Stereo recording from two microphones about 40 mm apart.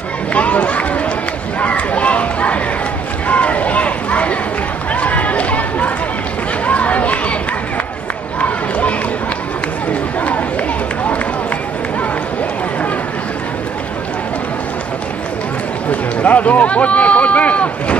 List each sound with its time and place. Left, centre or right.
0.3 s speech: left
1.6 s children playing: left
3.3 s a sound: left
5.0 s chatter: left
6.6 s run: left
8.4 s run: left
15.9 s speech: left